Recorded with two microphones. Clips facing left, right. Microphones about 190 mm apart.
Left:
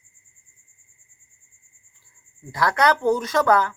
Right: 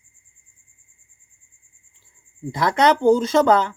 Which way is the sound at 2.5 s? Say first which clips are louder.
Right 3 dB; 20° right (ahead or behind).